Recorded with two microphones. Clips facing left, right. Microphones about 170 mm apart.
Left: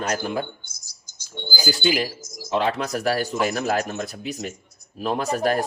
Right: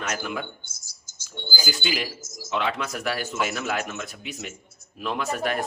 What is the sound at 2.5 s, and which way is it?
Speech, 35° left (ahead or behind).